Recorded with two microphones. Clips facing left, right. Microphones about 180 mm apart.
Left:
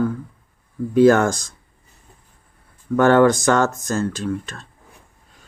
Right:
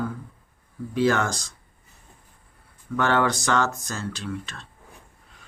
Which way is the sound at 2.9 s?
45° left (ahead or behind).